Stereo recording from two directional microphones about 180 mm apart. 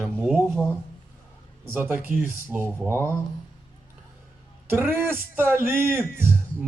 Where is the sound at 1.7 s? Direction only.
10° right (ahead or behind).